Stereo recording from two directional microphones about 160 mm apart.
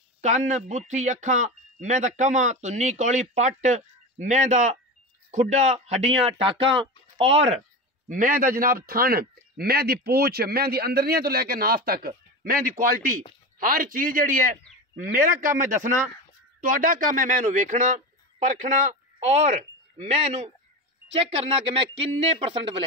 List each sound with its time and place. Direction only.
0.2 s speech: 50° right (ahead or behind)
8.1 s a man's voice: 55° right (ahead or behind)
22.2 s speech: 35° right (ahead or behind)